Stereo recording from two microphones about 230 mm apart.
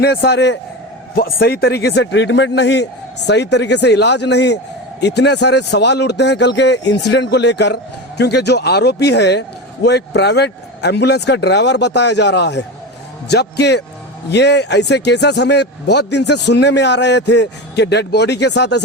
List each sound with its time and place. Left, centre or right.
0.0 s a man's voice: left